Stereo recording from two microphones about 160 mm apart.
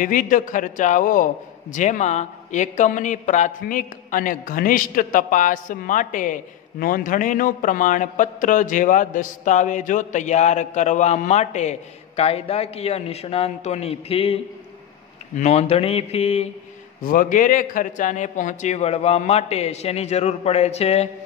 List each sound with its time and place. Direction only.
0.0 s a man's voice: 60° left (ahead or behind); by 16.4 s 40° left (ahead or behind)
17.0 s a man's voice: 60° left (ahead or behind); by 21.1 s 40° left (ahead or behind)